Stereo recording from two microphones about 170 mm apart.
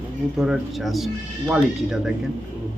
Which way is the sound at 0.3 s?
5° right (ahead or behind).